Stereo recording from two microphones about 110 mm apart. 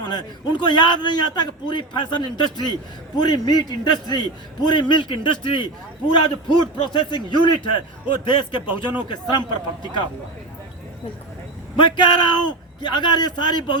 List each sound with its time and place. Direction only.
0.1 s a man's voice: 40° left (ahead or behind)
11.8 s a man's voice: 45° left (ahead or behind)